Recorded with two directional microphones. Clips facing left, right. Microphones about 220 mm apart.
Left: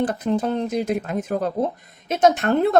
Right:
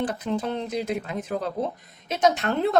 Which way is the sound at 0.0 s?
45° left (ahead or behind).